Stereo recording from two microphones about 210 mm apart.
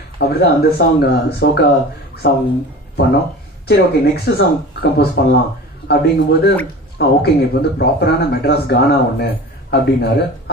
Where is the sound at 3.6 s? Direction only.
50° left (ahead or behind).